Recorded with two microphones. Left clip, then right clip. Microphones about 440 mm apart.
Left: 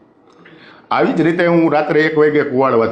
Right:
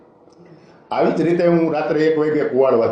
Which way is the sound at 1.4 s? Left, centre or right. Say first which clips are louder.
Left 5 dB; left.